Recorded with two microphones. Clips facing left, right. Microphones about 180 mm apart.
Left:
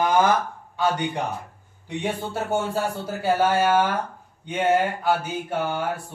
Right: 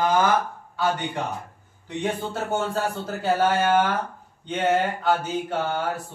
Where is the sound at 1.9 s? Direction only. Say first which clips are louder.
Even; 10° left (ahead or behind).